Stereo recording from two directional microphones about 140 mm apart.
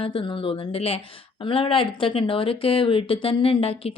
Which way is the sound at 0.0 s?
40° left (ahead or behind).